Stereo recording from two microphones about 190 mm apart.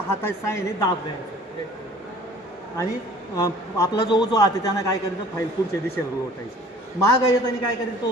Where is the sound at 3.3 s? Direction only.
15° left (ahead or behind).